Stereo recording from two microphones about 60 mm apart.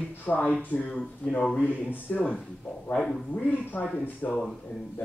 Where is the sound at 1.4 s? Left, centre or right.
Centre.